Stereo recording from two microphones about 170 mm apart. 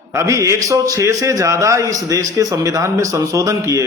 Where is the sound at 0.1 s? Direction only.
15° right (ahead or behind).